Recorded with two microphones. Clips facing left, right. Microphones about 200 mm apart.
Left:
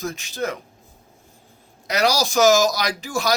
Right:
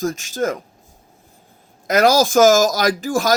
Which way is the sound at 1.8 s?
50° right (ahead or behind).